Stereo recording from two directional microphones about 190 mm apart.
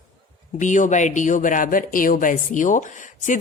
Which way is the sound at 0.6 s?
40° left (ahead or behind).